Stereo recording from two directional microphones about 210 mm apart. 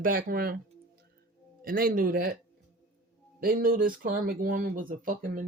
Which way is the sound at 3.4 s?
45° right (ahead or behind).